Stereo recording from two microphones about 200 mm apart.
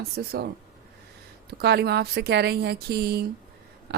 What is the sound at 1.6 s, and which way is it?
A woman's voice, 55° right (ahead or behind).